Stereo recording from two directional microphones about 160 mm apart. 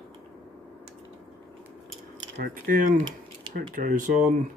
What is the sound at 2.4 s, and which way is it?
Speech, 60° right (ahead or behind).